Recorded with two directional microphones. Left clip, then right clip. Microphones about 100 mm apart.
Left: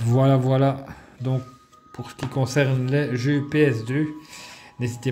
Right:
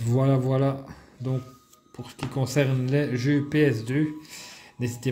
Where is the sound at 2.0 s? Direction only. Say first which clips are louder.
Left 4 dB; 40° left (ahead or behind).